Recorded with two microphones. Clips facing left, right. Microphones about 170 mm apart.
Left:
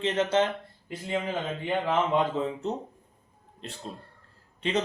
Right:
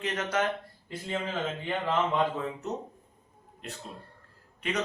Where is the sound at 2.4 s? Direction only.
30° left (ahead or behind).